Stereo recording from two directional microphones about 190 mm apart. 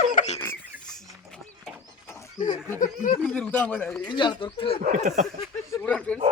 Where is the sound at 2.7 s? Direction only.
45° left (ahead or behind).